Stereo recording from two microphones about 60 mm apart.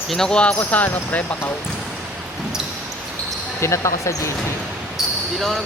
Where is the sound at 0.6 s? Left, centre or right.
Left.